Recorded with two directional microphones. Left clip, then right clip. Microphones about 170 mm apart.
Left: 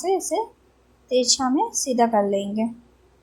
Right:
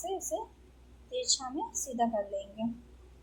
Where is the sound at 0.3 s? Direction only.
50° left (ahead or behind).